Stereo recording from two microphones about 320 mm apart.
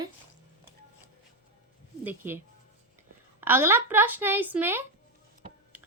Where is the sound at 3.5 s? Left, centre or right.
Centre.